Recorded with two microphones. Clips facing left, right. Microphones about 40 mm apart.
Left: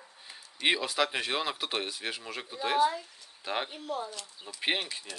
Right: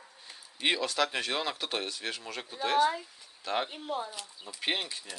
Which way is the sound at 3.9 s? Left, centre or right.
Right.